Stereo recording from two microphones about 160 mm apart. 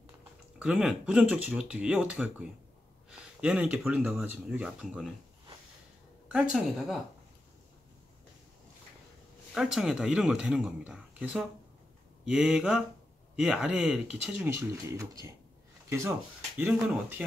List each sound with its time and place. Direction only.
0.6 s speech: 5° right (ahead or behind)
6.3 s speech: 5° right (ahead or behind)
9.5 s speech: 5° right (ahead or behind)